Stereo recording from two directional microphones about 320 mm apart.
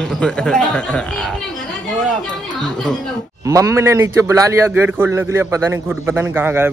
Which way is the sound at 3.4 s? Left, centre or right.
Centre.